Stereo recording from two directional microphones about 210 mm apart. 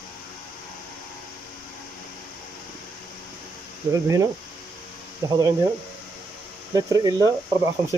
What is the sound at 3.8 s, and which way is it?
Speech, 15° right (ahead or behind).